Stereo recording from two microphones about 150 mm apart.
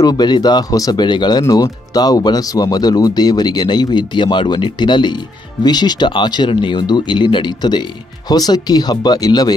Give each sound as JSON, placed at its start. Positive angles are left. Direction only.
{"t": 0.0, "sound": "speech", "side_deg": 25}